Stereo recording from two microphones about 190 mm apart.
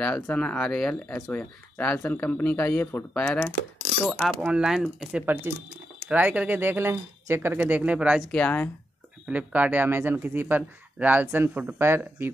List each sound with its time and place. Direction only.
0.0 s speech: 5° left (ahead or behind)
4.0 s speech: centre (ahead or behind)
8.3 s speech: 5° left (ahead or behind)
9.3 s speech: 10° right (ahead or behind)